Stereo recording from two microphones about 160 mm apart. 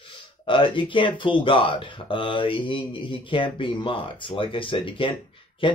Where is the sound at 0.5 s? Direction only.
30° left (ahead or behind).